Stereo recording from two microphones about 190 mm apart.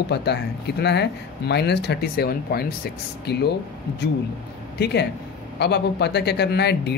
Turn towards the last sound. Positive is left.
turn(degrees=60)  # may be behind; listen again after turning